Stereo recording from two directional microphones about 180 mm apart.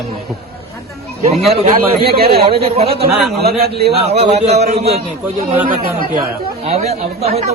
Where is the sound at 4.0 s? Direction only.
35° right (ahead or behind).